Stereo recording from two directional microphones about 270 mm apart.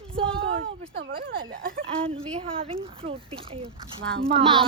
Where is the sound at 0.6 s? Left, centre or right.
Right.